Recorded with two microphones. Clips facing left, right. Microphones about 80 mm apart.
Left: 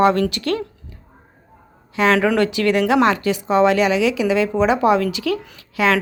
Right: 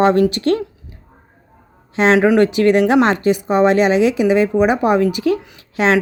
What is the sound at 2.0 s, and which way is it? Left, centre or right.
Speech, right.